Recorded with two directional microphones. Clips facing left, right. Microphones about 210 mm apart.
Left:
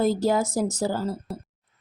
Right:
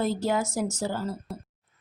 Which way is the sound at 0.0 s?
35° left (ahead or behind).